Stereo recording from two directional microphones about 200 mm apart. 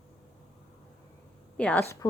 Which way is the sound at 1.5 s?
5° left (ahead or behind).